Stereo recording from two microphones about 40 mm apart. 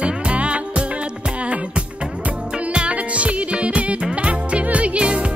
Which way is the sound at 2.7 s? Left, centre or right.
Right.